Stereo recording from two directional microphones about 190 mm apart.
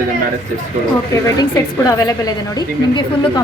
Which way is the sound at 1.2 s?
20° left (ahead or behind).